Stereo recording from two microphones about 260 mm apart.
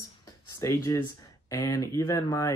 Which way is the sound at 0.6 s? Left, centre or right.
Centre.